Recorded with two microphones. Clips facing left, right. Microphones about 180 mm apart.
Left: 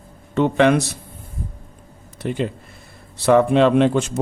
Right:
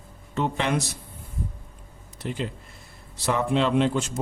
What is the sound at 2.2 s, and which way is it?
Speech, 65° left (ahead or behind).